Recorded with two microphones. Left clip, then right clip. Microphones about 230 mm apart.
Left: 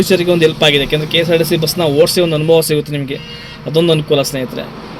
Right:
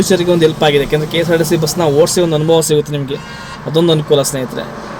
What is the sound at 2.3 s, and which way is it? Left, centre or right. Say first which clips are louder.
Speech: left 1 dB; centre.